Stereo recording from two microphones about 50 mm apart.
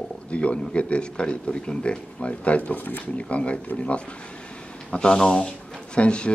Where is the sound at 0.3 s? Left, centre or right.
Left.